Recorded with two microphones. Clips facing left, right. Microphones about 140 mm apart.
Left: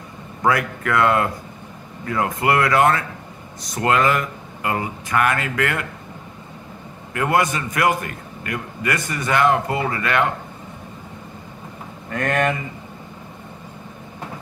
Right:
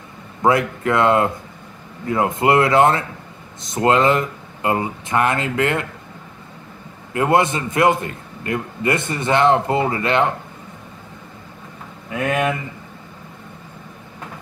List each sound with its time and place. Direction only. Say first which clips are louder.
0.4 s a man's voice: right 3 dB; 25° right (ahead or behind)
7.2 s a man's voice: right 3 dB; 25° right (ahead or behind)
12.1 s speech: right 1 dB; 5° right (ahead or behind)